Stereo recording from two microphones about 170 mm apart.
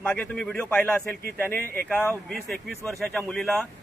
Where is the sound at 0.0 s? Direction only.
10° left (ahead or behind).